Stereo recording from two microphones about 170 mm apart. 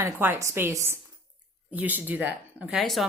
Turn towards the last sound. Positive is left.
turn(degrees=0)  # may be behind; listen again after turning